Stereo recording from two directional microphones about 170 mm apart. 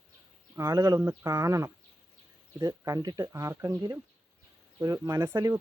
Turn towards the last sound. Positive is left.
turn(degrees=-20)  # may be behind; listen again after turning